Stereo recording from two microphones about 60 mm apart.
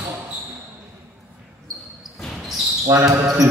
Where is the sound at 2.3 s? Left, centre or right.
Centre.